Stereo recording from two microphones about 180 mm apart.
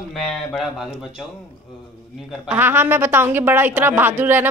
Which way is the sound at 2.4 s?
10° right (ahead or behind).